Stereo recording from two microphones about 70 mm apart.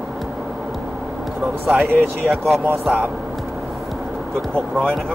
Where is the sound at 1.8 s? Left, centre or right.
Right.